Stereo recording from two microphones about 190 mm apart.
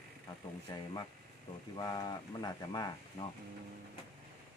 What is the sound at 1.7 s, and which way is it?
Speech, 25° left (ahead or behind).